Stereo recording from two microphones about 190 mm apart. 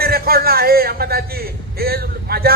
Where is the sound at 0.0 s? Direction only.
55° right (ahead or behind).